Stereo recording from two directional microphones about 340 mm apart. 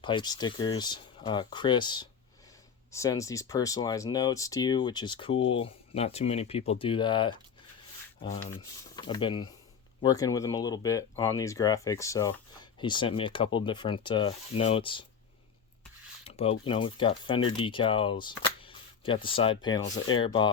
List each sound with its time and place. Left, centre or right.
0.0 s speech: centre
16.2 s speech: centre